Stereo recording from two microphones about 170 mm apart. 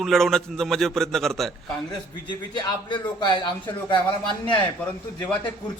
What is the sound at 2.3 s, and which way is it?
Speech, 25° left (ahead or behind).